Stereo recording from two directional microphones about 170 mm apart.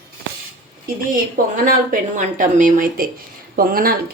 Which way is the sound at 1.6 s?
50° right (ahead or behind).